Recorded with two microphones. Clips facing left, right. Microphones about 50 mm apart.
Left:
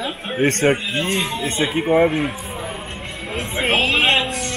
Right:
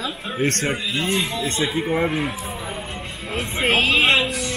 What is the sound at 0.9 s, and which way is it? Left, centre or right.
Speech, left.